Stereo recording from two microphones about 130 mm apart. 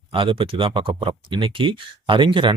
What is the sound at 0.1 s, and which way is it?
Speech, 40° right (ahead or behind).